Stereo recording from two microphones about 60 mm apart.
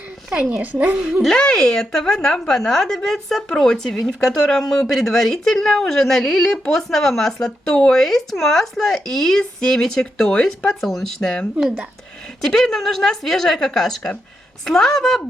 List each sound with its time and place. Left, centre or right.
0.3 s a woman's voice: centre
0.6 s a woman's voice: right
1.2 s a woman's voice: centre
12.5 s a woman's voice: centre